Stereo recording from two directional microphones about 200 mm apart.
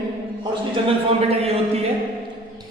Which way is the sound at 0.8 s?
30° right (ahead or behind).